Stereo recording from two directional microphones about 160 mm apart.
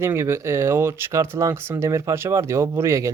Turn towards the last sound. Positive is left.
turn(degrees=-15)  # may be behind; listen again after turning